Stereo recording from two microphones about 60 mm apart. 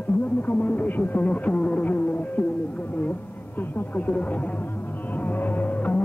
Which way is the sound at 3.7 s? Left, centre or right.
Left.